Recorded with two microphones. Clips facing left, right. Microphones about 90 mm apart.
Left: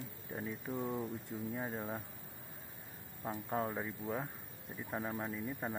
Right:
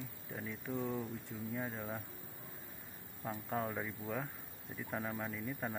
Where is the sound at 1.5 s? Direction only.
20° left (ahead or behind).